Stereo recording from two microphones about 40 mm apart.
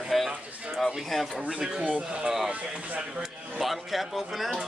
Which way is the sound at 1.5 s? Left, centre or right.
Right.